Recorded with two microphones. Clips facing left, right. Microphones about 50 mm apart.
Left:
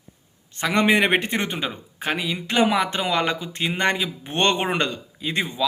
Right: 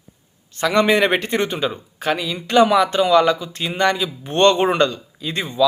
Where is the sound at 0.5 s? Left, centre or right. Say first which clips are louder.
Right 3 dB; left.